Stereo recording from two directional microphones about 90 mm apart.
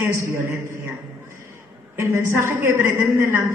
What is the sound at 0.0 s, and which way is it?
Speech, 30° right (ahead or behind).